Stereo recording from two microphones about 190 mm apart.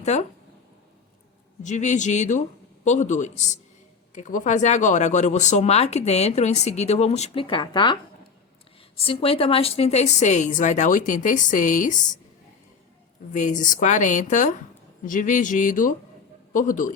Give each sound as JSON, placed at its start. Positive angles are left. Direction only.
{"t": 0.0, "sound": "speech", "side_deg": 35}
{"t": 1.6, "sound": "speech", "side_deg": 40}
{"t": 9.0, "sound": "speech", "side_deg": 30}
{"t": 13.3, "sound": "a man's voice", "side_deg": 40}